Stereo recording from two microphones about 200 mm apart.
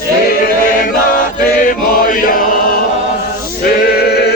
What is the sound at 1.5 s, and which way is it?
Chant, 40° left (ahead or behind).